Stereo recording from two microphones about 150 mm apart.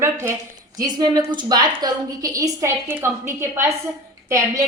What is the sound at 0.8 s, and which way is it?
A woman's voice, 30° right (ahead or behind).